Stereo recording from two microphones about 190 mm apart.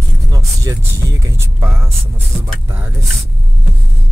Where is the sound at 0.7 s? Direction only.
15° right (ahead or behind).